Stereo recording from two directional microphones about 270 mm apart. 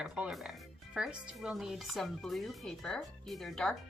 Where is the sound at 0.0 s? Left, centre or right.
Centre.